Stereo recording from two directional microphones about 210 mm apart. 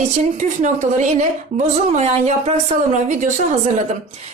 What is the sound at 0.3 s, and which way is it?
A woman's voice, 35° right (ahead or behind).